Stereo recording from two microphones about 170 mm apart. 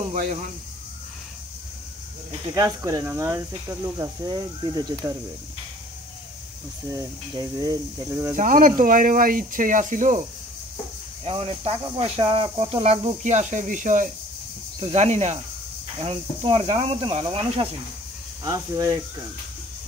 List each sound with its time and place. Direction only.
0.1 s speech: 45° right (ahead or behind)
2.5 s speech: 20° right (ahead or behind)
6.9 s speech: 20° right (ahead or behind)
8.4 s speech: 50° right (ahead or behind)
11.2 s speech: 35° right (ahead or behind)
18.4 s speech: 20° right (ahead or behind)